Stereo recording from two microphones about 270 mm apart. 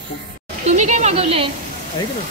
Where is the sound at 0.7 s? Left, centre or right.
Right.